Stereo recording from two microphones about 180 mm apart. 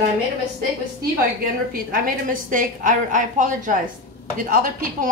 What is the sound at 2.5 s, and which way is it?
A woman's voice, 45° right (ahead or behind).